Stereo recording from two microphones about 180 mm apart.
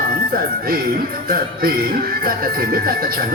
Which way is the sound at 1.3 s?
55° right (ahead or behind).